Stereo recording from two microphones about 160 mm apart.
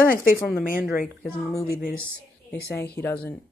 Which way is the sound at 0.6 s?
60° left (ahead or behind).